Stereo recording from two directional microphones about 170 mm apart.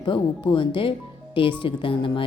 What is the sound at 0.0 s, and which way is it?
A woman's voice, 30° left (ahead or behind).